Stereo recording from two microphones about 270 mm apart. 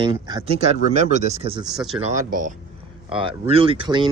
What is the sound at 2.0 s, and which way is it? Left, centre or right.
Speech, right.